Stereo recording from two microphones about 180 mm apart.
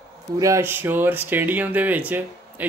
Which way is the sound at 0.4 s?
15° right (ahead or behind).